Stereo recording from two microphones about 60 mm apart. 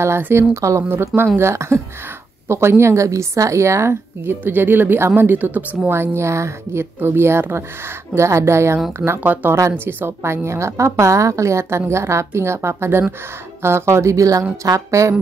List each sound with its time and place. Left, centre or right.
0.3 s speech: right
0.8 s a woman's voice: right
4.2 s speech: right
5.9 s a woman's voice: right
9.2 s a woman's voice: right